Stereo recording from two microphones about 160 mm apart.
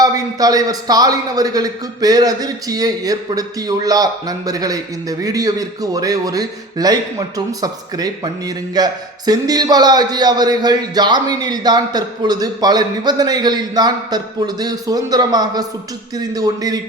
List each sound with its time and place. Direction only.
0.0 s a man's voice: 25° right (ahead or behind)